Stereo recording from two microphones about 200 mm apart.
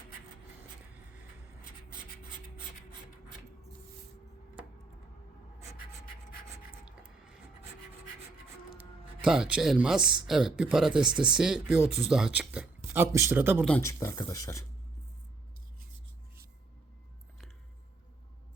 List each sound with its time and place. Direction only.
6.7 s rub: 5° right (ahead or behind)
9.2 s speech: 5° right (ahead or behind)
13.7 s speech: 10° left (ahead or behind)